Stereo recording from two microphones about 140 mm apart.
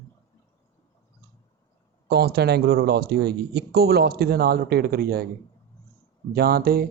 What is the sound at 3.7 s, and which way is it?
Speech, 90° right.